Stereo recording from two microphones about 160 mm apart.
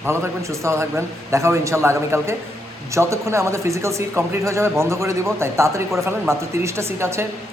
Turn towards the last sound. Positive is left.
turn(degrees=-15)  # may be behind; listen again after turning